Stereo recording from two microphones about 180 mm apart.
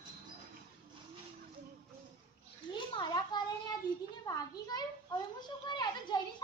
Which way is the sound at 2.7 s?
25° left (ahead or behind).